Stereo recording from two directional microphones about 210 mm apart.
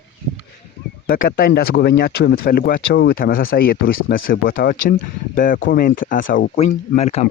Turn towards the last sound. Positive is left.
turn(degrees=30)  # may be behind; listen again after turning